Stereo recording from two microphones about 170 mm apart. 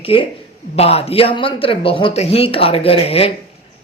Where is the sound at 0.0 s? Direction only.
35° left (ahead or behind).